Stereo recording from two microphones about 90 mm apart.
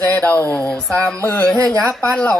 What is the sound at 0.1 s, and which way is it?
Speech, 20° left (ahead or behind).